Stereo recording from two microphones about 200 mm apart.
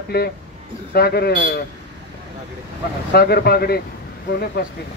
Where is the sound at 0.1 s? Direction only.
50° left (ahead or behind).